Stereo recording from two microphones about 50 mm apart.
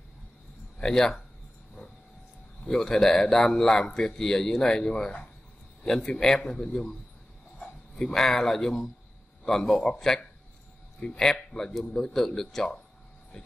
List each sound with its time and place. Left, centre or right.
0.7 s speech: centre
2.6 s a man's voice: centre
7.5 s a sound: centre
8.1 s a man's voice: centre
11.0 s a man's voice: centre